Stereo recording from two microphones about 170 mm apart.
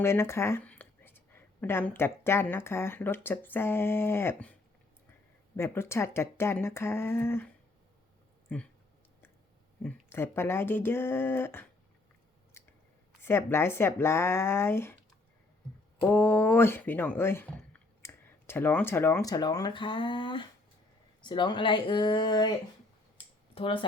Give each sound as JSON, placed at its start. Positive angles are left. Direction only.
{"t": 0.0, "sound": "a woman's voice", "side_deg": 15}
{"t": 5.5, "sound": "speech", "side_deg": 15}
{"t": 9.8, "sound": "speech", "side_deg": 15}
{"t": 12.6, "sound": "chewing", "side_deg": 15}
{"t": 13.2, "sound": "speech", "side_deg": 15}
{"t": 16.0, "sound": "speech", "side_deg": 10}
{"t": 23.1, "sound": "a sound", "side_deg": 30}